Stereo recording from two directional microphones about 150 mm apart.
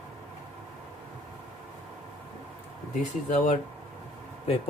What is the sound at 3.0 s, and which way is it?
Speech, 55° left (ahead or behind).